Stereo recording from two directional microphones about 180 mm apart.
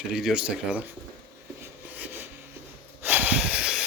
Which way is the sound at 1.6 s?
10° right (ahead or behind).